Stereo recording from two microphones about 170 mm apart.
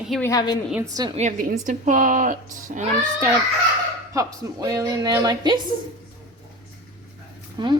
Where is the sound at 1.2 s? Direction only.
50° right (ahead or behind).